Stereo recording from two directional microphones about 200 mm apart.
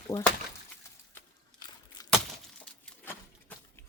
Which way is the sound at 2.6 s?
5° left (ahead or behind).